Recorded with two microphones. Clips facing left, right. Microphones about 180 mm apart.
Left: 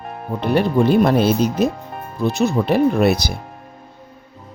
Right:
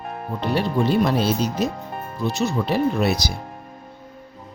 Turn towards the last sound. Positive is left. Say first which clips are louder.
# left 5 dB
turn(degrees=55)  # may be behind; listen again after turning